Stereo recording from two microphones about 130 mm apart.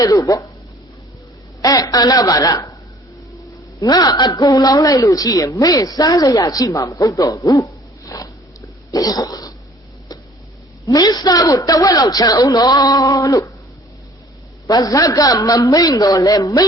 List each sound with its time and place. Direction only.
0.0 s a woman's voice: 30° left (ahead or behind)
1.6 s a woman's voice: 30° left (ahead or behind)
3.8 s a woman's voice: 30° left (ahead or behind)
8.9 s a sound: 30° left (ahead or behind)
10.8 s a woman's voice: 30° left (ahead or behind)
14.7 s a woman's voice: 30° left (ahead or behind)